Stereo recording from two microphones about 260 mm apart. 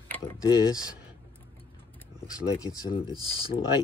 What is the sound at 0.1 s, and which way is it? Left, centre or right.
Speech, centre.